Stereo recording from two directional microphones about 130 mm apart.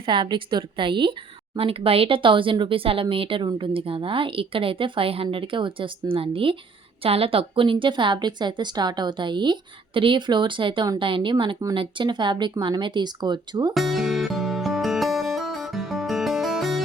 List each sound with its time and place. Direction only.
0.0 s a woman's voice: 40° right (ahead or behind)
13.7 s music: centre (ahead or behind)